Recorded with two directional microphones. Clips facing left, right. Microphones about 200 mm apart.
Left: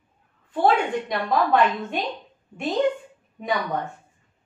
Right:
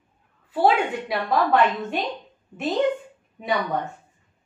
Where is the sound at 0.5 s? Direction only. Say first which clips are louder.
Even; 5° right (ahead or behind).